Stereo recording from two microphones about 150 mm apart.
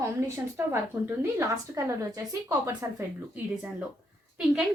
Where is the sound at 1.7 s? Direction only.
20° right (ahead or behind).